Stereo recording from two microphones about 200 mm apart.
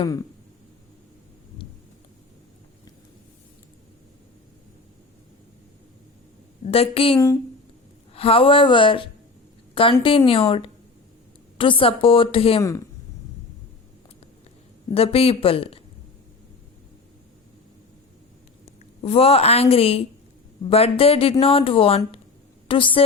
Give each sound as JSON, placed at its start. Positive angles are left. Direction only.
{"t": 6.7, "sound": "a woman's voice", "side_deg": 30}
{"t": 14.9, "sound": "a woman's voice", "side_deg": 30}
{"t": 18.6, "sound": "a woman's voice", "side_deg": 30}